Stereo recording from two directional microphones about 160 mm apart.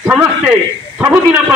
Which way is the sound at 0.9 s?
10° right (ahead or behind).